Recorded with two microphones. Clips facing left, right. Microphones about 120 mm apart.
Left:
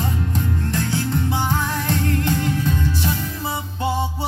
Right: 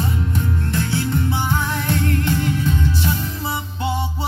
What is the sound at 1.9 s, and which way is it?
Music, 30° left (ahead or behind).